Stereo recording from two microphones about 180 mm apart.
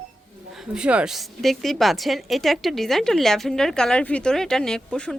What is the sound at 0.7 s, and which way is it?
A woman's voice, 5° right (ahead or behind).